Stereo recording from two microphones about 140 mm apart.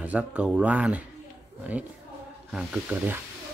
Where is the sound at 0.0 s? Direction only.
10° right (ahead or behind).